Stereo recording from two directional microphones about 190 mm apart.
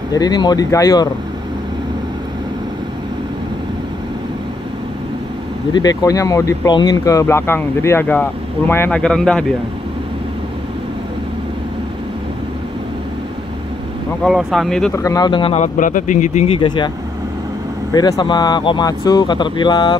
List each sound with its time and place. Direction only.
0.1 s speech: 20° left (ahead or behind)
5.7 s speech: 20° left (ahead or behind); by 9.5 s 5° left (ahead or behind)
14.2 s speech: centre (ahead or behind)
15.0 s speech: 20° left (ahead or behind)
17.9 s speech: 20° left (ahead or behind)